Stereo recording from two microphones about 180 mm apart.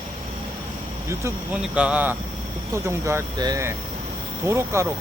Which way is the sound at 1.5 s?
5° right (ahead or behind).